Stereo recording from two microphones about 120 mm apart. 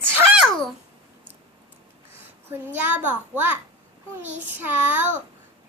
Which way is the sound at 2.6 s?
15° right (ahead or behind).